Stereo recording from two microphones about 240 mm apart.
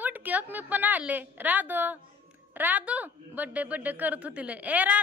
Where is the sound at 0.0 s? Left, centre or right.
Centre.